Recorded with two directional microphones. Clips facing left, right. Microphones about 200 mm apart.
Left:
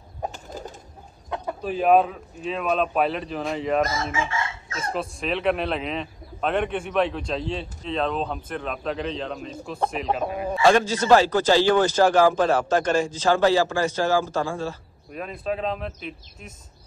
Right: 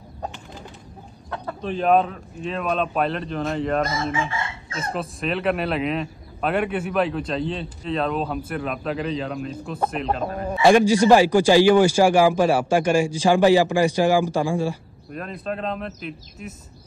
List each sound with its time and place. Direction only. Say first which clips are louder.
0.3 s bird flight: left 3 dB; 45° left (ahead or behind)
1.6 s a man's voice: even; 5° left (ahead or behind)
4.0 s chicken: right 2 dB; 30° right (ahead or behind)
4.9 s a man's voice: right 1 dB; centre (ahead or behind)
10.6 s a man's voice: right 5 dB; 15° right (ahead or behind)
15.1 s a man's voice: left 1 dB; 5° left (ahead or behind)